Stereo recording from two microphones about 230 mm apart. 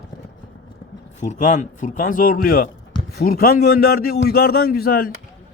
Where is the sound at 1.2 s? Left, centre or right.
Left.